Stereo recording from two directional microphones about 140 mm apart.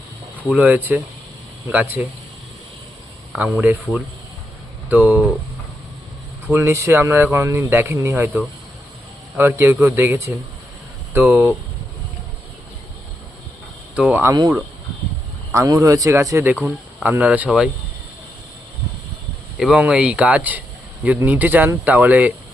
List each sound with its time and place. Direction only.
0.5 s speech: 10° right (ahead or behind)
3.3 s speech: 10° right (ahead or behind)
6.5 s speech: 20° right (ahead or behind)
9.4 s speech: 15° right (ahead or behind)
13.9 s speech: 10° right (ahead or behind)
15.5 s speech: 25° right (ahead or behind)
16.6 s speech: 10° right (ahead or behind)
19.5 s speech: 5° right (ahead or behind)